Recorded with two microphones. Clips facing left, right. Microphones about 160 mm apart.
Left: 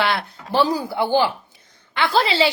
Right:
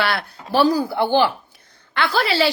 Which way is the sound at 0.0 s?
20° left (ahead or behind).